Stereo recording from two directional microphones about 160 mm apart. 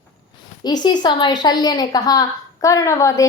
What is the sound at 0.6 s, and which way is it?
A woman's voice, 25° left (ahead or behind).